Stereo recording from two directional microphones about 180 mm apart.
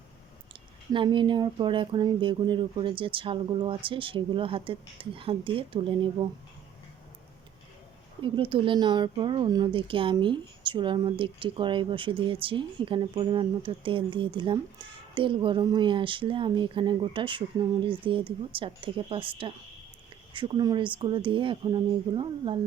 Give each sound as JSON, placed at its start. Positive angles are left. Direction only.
{"t": 0.9, "sound": "a woman's voice", "side_deg": -25}
{"t": 8.2, "sound": "a woman's voice", "side_deg": -30}